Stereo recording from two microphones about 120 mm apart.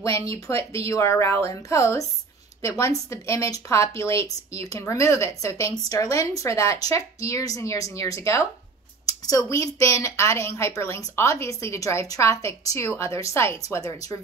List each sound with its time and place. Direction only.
0.3 s a woman's voice: 25° left (ahead or behind)